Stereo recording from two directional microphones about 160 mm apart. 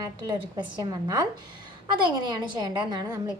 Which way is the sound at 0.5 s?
25° right (ahead or behind).